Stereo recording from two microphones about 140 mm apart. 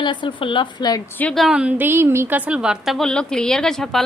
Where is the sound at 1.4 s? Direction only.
5° right (ahead or behind).